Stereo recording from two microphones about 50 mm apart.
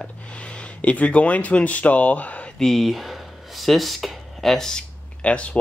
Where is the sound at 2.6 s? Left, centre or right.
Centre.